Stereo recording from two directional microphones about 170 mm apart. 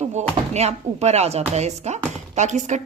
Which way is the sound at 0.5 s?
40° right (ahead or behind).